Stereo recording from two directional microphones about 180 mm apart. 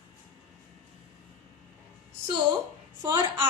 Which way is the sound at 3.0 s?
15° right (ahead or behind).